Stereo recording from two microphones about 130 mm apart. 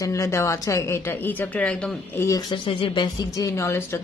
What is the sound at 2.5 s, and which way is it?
Speech, 40° left (ahead or behind).